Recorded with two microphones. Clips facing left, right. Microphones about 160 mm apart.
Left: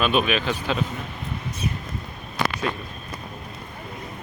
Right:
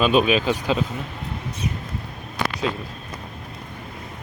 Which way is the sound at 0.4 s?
10° right (ahead or behind).